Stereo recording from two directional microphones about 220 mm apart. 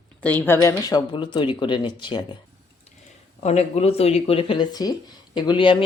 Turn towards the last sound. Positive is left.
turn(degrees=20)  # may be behind; listen again after turning